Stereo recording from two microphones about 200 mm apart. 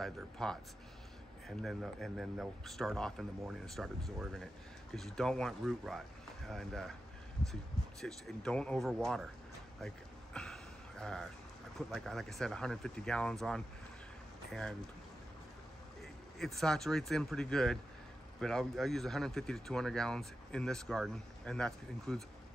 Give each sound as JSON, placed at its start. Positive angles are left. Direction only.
{"t": 0.0, "sound": "speech", "side_deg": 5}
{"t": 1.6, "sound": "speech", "side_deg": 0}
{"t": 8.0, "sound": "speech", "side_deg": 5}
{"t": 9.8, "sound": "a sound", "side_deg": 5}
{"t": 11.9, "sound": "speech", "side_deg": 0}
{"t": 16.0, "sound": "speech", "side_deg": 0}